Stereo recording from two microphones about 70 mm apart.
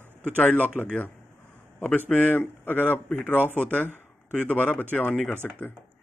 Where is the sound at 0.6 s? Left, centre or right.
Left.